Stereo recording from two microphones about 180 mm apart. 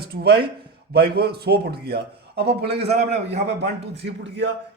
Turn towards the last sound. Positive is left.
turn(degrees=-75)  # may be behind; listen again after turning